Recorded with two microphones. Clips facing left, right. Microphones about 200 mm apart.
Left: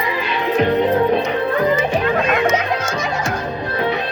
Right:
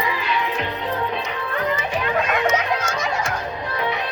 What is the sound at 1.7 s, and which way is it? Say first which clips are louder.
Music: left 6 dB; 35° left (ahead or behind).